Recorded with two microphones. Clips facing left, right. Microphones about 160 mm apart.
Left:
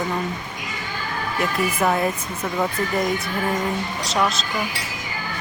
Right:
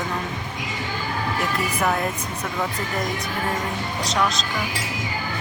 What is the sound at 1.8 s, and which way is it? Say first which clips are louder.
Speech: left 3 dB; 5° left (ahead or behind).